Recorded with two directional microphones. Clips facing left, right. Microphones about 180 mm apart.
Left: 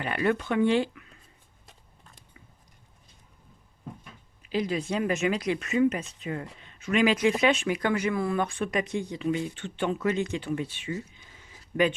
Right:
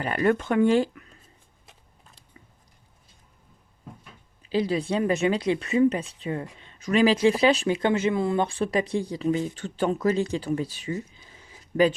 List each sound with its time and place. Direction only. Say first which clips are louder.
0.0 s speech: right 3 dB; 40° right (ahead or behind)
4.4 s speech: right 4 dB; 30° right (ahead or behind)